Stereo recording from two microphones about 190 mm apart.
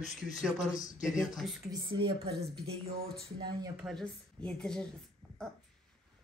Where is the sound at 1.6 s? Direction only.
25° right (ahead or behind).